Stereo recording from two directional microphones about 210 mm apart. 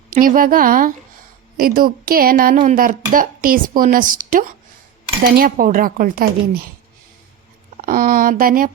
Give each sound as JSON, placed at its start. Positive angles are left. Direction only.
{"t": 0.1, "sound": "speech", "side_deg": -40}
{"t": 7.8, "sound": "speech", "side_deg": -40}